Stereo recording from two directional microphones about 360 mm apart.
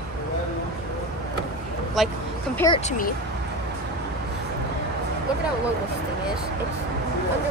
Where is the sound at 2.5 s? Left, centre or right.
Centre.